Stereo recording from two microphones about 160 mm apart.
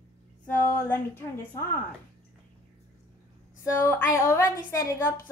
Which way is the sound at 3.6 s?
15° left (ahead or behind).